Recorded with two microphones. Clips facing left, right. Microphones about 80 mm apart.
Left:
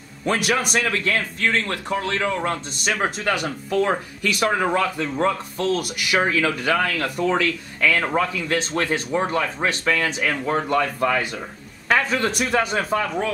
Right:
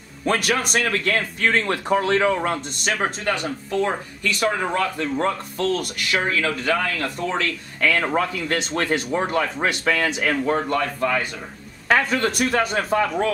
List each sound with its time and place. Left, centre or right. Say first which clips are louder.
0.2 s speech: even; centre
1.5 s speech: right 6 dB; centre
2.4 s speech: even; centre
7.8 s speech: even; centre
10.8 s speech: left 2 dB; centre
11.9 s speech: right 1 dB; centre